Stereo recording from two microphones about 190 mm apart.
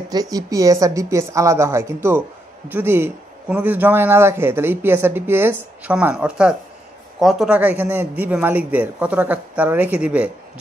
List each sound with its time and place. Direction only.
0.1 s a man's voice: 20° right (ahead or behind)